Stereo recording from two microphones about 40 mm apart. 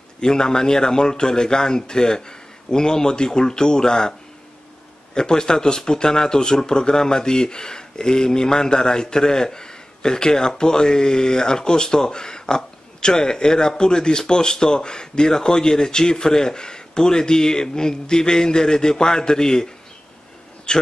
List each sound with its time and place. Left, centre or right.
0.2 s a man's voice: centre
5.1 s speech: centre